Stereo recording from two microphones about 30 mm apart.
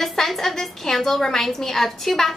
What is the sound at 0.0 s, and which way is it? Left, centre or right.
Music, centre.